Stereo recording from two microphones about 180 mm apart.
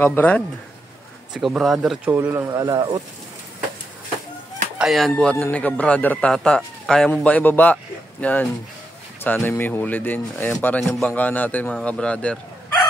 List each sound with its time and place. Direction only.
0.0 s a man's voice: 10° left (ahead or behind)
1.3 s speech: centre (ahead or behind)
2.1 s a man's voice: 15° right (ahead or behind)
4.7 s a man's voice: centre (ahead or behind)